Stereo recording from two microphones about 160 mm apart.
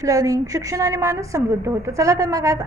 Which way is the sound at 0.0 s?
20° right (ahead or behind).